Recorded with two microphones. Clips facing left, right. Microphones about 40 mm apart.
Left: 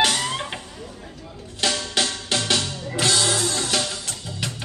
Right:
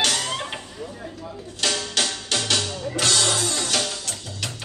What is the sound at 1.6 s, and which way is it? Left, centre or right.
Music, centre.